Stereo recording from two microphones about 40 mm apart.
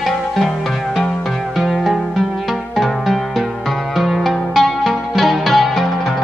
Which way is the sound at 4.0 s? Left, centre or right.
Centre.